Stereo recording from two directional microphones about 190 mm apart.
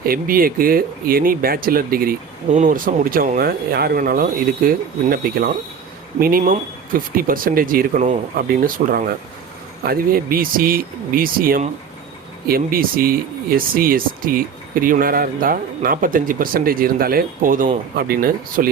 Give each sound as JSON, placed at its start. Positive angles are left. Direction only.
{"t": 0.0, "sound": "speech", "side_deg": -50}